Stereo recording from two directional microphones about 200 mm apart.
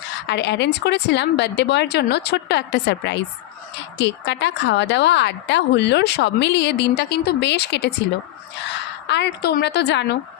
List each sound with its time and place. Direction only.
0.3 s a woman's voice: 60° left (ahead or behind)
9.0 s a woman's voice: 60° left (ahead or behind)